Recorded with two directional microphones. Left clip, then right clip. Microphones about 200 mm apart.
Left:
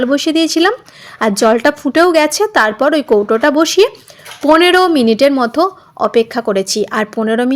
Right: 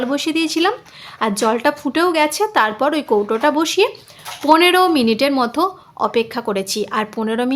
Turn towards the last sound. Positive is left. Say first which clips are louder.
# left 6 dB
turn(degrees=20)  # may be behind; listen again after turning